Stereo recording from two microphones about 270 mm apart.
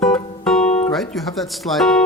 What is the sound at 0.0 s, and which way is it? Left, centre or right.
Music, centre.